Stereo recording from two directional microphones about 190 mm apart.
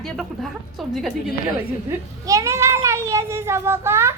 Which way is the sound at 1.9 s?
15° right (ahead or behind).